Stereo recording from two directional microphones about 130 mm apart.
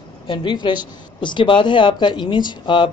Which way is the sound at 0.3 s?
40° left (ahead or behind).